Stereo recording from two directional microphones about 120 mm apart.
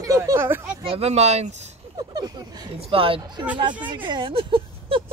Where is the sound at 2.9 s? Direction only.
50° right (ahead or behind).